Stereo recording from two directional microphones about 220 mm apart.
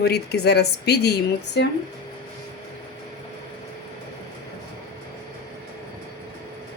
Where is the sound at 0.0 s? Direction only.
45° left (ahead or behind).